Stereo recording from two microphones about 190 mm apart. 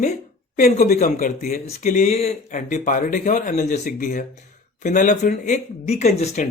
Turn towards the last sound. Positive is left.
turn(degrees=35)  # may be behind; listen again after turning